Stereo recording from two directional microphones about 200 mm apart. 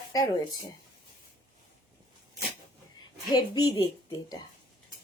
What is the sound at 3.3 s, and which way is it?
Speech, 20° left (ahead or behind).